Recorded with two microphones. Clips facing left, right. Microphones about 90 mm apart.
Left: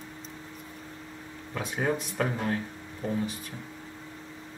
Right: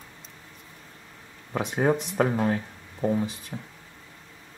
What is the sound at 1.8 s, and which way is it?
Speech, 30° right (ahead or behind).